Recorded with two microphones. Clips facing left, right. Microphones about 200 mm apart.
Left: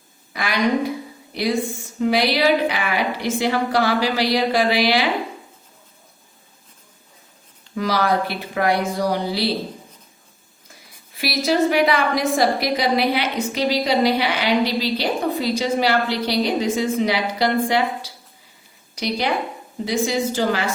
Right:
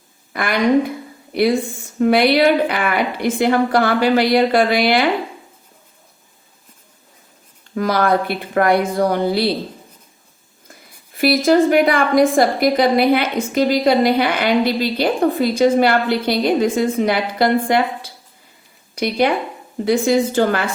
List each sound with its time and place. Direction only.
0.3 s a woman's voice: 55° right (ahead or behind)
7.8 s a woman's voice: 50° right (ahead or behind)
11.1 s a woman's voice: 50° right (ahead or behind)